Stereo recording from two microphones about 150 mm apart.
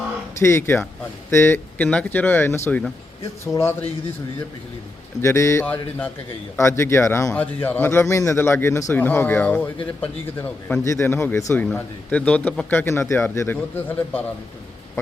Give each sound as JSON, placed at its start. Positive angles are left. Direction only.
{"t": 0.3, "sound": "a man's voice", "side_deg": 15}
{"t": 5.2, "sound": "a man's voice", "side_deg": 20}